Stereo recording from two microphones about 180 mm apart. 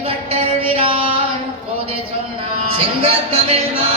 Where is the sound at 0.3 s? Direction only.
30° right (ahead or behind).